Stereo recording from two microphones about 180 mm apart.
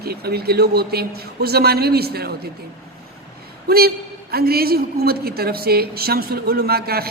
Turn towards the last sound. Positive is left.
turn(degrees=-60)  # may be behind; listen again after turning